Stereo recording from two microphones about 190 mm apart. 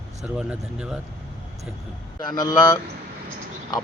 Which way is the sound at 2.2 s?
20° left (ahead or behind).